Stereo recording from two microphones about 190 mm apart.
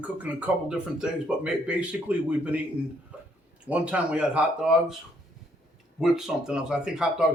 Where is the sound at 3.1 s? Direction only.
5° right (ahead or behind).